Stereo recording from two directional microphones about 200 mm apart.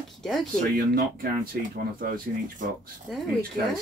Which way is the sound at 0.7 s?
50° right (ahead or behind).